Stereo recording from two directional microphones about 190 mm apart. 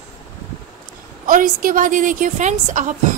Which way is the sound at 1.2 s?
45° right (ahead or behind).